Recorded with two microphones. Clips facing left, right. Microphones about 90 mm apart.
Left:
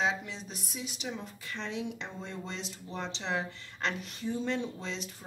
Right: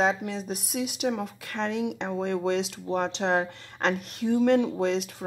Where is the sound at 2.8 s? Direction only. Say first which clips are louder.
Right 11 dB; 60° right (ahead or behind).